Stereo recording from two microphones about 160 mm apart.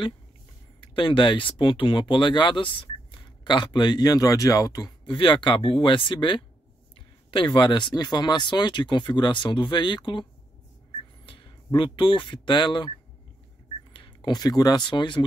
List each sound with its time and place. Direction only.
0.7 s speech: 30° left (ahead or behind)
11.2 s speech: 30° left (ahead or behind)
13.9 s speech: 30° left (ahead or behind)